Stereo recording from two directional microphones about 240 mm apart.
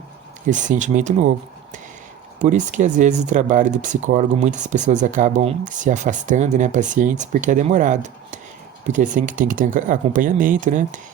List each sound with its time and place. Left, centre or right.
0.4 s speech: right
2.4 s speech: right